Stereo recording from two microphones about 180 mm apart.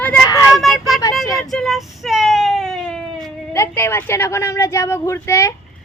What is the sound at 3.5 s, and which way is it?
A woman's voice, 15° left (ahead or behind).